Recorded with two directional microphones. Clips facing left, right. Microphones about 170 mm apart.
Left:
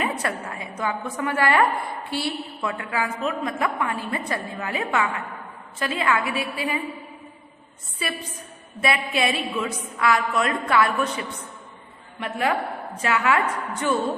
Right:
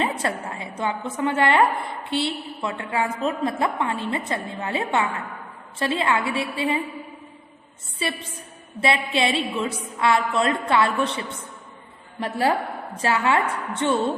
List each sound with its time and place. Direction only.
0.0 s a woman's voice: 30° right (ahead or behind)
7.9 s a woman's voice: 25° right (ahead or behind)